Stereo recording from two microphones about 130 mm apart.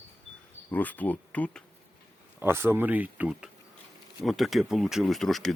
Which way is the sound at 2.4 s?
15° right (ahead or behind).